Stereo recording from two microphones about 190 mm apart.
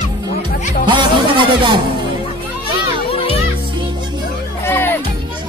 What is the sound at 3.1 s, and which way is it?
Music, 30° left (ahead or behind).